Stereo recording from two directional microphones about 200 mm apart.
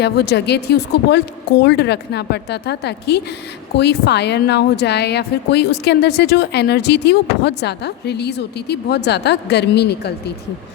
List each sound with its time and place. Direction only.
0.0 s a woman's voice: 55° left (ahead or behind)